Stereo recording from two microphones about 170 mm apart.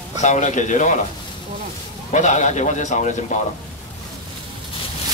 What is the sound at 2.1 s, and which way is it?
A man's voice, 45° left (ahead or behind).